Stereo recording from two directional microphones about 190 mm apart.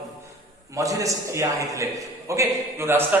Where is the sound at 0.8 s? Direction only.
15° right (ahead or behind).